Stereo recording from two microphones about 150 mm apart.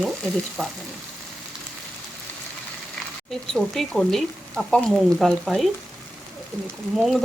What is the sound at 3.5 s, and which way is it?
Speech, centre (ahead or behind).